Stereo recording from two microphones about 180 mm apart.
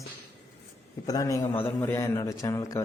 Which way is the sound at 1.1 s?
20° left (ahead or behind).